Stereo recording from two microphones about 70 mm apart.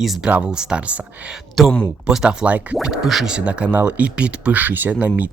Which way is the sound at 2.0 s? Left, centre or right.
Centre.